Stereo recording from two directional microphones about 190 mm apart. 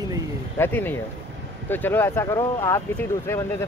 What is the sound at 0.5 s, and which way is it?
Speech, 10° left (ahead or behind).